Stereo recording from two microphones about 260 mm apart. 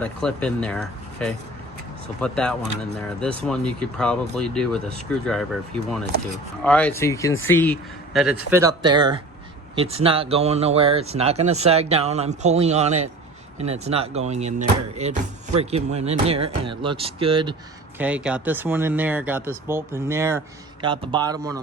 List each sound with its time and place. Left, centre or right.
0.0 s speech: centre; by 17.5 s right
17.9 s speech: centre